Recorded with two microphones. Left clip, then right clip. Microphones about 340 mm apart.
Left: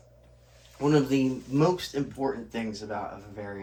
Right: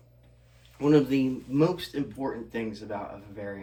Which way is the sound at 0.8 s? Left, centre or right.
Centre.